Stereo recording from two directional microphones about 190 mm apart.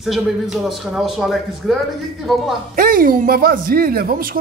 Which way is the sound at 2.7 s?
45° right (ahead or behind).